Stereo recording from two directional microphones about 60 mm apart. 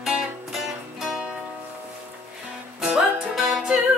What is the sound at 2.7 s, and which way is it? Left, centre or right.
Music, centre.